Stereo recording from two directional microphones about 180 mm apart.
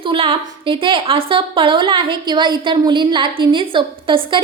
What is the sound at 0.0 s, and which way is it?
A woman's voice, 30° right (ahead or behind).